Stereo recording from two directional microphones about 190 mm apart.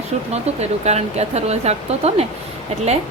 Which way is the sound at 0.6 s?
35° right (ahead or behind).